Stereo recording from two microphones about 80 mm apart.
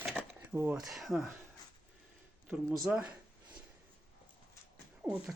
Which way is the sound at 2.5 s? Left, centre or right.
Centre.